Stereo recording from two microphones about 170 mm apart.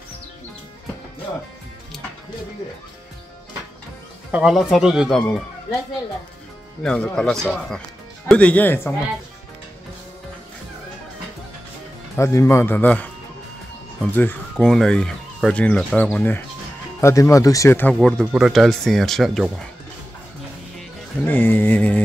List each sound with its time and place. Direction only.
4.3 s speech: 5° right (ahead or behind)
6.8 s speech: 5° left (ahead or behind)
12.2 s speech: 15° left (ahead or behind)
17.9 s speech: centre (ahead or behind)
21.2 s speech: 10° left (ahead or behind)